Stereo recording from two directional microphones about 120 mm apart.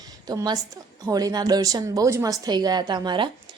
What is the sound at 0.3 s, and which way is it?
A woman's voice, 30° right (ahead or behind).